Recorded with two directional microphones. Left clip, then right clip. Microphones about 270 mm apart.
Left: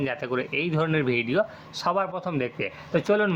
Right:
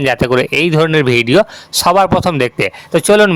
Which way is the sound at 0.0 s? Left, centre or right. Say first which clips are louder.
Right 15 dB; right.